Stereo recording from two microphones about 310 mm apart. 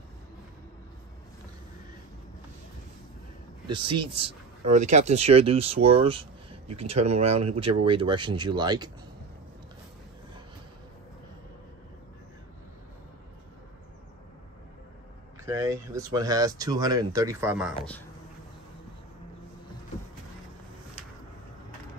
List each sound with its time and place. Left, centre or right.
3.6 s speech: centre
15.4 s speech: centre